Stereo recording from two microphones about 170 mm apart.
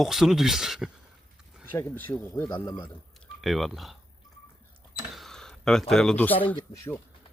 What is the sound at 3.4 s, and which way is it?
Speech, centre (ahead or behind).